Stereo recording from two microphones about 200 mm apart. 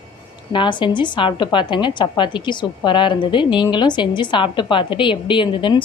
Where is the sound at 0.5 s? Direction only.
25° left (ahead or behind).